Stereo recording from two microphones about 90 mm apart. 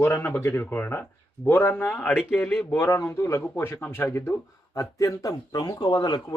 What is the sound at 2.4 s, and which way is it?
Speech, 10° left (ahead or behind).